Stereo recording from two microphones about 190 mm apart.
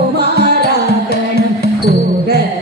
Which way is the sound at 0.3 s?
60° right (ahead or behind).